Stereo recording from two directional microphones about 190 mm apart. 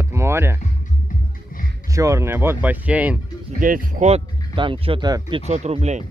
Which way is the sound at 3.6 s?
45° right (ahead or behind).